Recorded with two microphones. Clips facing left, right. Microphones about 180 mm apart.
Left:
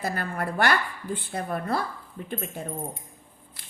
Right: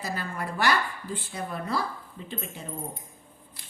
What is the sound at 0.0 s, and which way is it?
Speech, 55° left (ahead or behind).